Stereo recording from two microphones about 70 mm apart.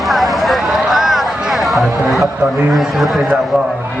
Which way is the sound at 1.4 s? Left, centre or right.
Centre.